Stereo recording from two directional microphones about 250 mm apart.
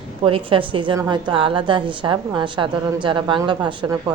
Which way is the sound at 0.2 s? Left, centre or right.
Right.